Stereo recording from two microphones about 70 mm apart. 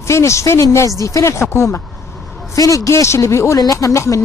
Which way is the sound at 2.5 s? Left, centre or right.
Left.